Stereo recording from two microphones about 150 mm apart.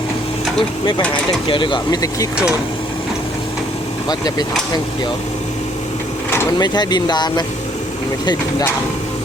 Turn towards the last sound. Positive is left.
turn(degrees=30)  # may be behind; listen again after turning